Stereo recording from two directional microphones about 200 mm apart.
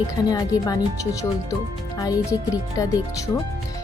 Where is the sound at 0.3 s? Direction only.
20° left (ahead or behind).